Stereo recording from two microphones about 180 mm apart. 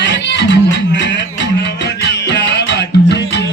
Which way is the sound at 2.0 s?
70° left (ahead or behind).